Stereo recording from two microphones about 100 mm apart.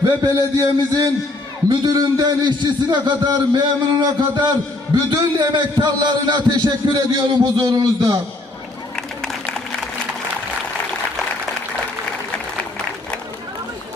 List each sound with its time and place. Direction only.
0.2 s a man's voice: 35° right (ahead or behind)